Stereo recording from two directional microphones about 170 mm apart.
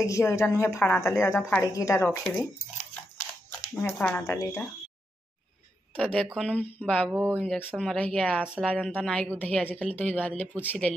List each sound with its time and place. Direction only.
0.0 s a woman's voice: 15° left (ahead or behind)
3.7 s a woman's voice: 5° left (ahead or behind)
4.2 s a woman's voice: 20° left (ahead or behind)
5.9 s a woman's voice: 5° left (ahead or behind)
8.5 s a woman's voice: 5° right (ahead or behind)